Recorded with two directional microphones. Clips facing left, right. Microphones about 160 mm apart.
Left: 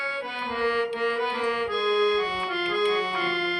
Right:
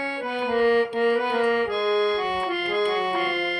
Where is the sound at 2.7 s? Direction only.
50° right (ahead or behind).